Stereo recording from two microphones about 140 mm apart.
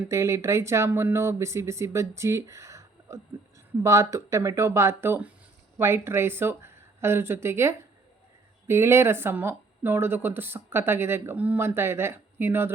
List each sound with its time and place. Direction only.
0.1 s speech: 20° right (ahead or behind)